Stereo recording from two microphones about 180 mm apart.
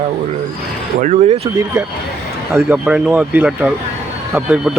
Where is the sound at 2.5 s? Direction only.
15° right (ahead or behind).